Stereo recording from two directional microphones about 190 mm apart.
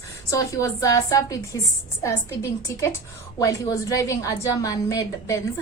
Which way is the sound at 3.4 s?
20° left (ahead or behind).